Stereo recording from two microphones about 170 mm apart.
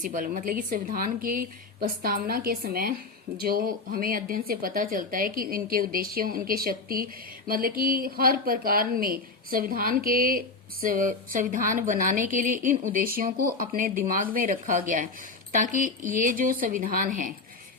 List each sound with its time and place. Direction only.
0.0 s speech: 55° right (ahead or behind)